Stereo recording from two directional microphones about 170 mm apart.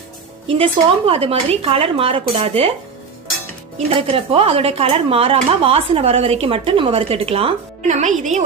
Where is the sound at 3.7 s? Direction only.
35° right (ahead or behind).